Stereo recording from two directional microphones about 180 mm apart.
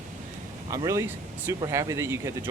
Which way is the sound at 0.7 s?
15° right (ahead or behind).